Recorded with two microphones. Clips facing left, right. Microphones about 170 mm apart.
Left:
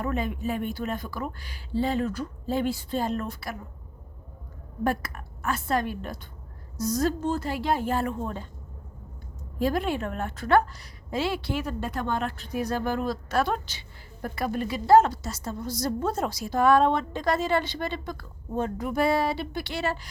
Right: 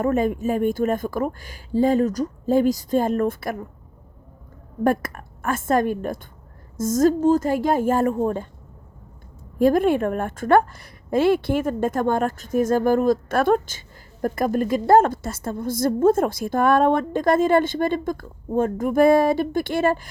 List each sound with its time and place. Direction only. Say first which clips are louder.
0.0 s a woman's voice: right 8 dB; 45° right (ahead or behind)
4.8 s a woman's voice: right 7 dB; 50° right (ahead or behind)
9.6 s a woman's voice: right 9 dB; 50° right (ahead or behind)